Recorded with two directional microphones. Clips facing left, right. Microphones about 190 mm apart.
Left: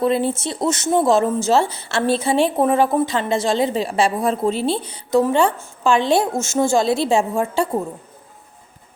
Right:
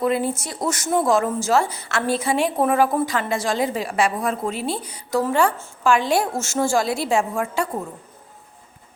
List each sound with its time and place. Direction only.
0.0 s speech: 30° left (ahead or behind)